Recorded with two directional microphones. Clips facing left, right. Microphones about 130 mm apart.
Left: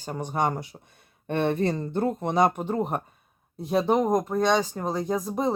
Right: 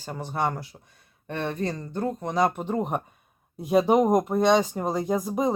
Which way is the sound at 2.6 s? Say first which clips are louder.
Even; 5° left (ahead or behind).